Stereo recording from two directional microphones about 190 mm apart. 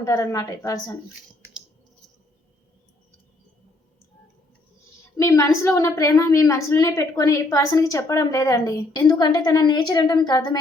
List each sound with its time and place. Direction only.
0.0 s a woman's voice: 15° left (ahead or behind)
5.1 s a woman's voice: 15° left (ahead or behind)